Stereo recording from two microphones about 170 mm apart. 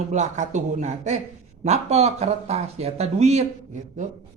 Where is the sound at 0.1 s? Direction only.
45° right (ahead or behind).